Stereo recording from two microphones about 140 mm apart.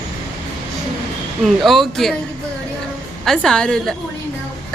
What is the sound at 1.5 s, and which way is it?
Speech, centre (ahead or behind).